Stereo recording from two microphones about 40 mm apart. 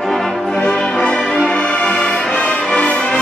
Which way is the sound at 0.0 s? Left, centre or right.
Centre.